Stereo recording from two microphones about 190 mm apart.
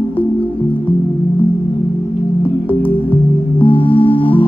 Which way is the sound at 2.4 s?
30° left (ahead or behind).